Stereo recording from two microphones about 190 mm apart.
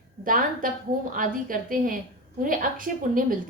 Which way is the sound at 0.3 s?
45° right (ahead or behind).